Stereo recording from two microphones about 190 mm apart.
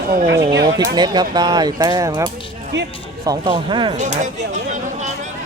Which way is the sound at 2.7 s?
70° right (ahead or behind).